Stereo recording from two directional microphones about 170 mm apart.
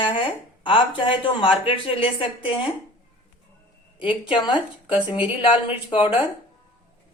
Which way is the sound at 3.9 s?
30° left (ahead or behind).